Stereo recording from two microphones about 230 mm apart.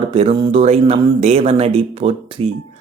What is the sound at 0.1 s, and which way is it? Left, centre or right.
Speech, right.